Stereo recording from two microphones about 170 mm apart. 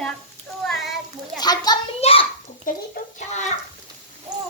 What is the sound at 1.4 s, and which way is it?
Speech, 25° left (ahead or behind).